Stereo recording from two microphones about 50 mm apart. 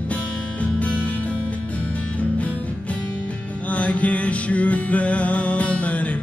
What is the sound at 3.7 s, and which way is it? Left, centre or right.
Music, left.